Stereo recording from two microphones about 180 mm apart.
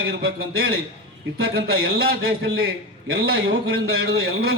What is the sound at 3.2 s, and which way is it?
Speech, 90° right.